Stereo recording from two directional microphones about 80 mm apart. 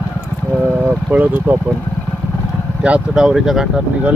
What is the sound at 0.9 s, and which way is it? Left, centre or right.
Speech, right.